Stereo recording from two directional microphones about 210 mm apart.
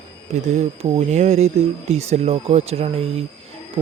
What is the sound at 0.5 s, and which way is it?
Speech, 30° right (ahead or behind).